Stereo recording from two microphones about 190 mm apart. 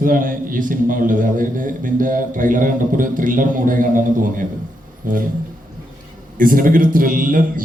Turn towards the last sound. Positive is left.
turn(degrees=-45)  # may be behind; listen again after turning